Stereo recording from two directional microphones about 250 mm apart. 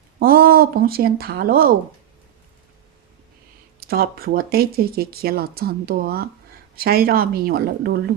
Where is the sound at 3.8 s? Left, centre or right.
Right.